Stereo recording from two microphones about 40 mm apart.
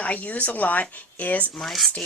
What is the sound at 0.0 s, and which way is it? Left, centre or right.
A woman's voice, left.